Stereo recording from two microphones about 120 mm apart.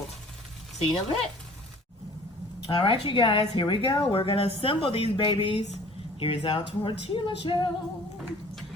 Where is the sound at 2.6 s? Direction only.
45° left (ahead or behind).